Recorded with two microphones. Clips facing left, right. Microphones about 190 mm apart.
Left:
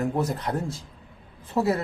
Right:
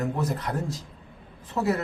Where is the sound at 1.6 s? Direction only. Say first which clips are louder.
Left 2 dB; 30° left (ahead or behind).